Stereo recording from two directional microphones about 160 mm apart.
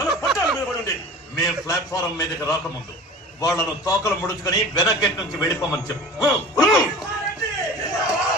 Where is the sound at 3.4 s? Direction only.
20° left (ahead or behind).